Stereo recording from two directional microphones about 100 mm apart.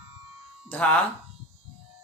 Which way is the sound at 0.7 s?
15° left (ahead or behind).